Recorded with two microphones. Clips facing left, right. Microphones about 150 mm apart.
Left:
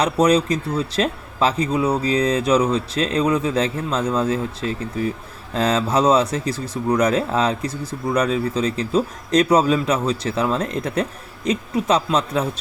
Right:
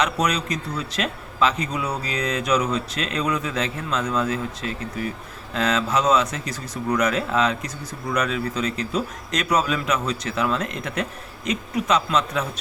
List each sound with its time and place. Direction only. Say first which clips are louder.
0.0 s speech: left 7 dB; 30° left (ahead or behind)